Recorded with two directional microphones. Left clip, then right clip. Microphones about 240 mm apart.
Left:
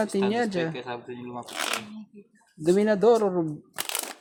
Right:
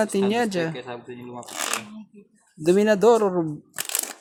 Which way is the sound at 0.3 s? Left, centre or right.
Centre.